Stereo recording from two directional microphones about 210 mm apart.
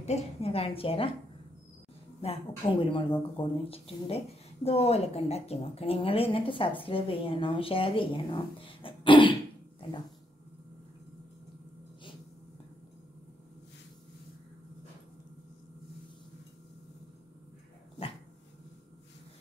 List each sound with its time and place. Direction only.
0.0 s a woman's voice: 30° left (ahead or behind)
2.2 s a woman's voice: 25° left (ahead or behind)
9.8 s a sound: 25° left (ahead or behind)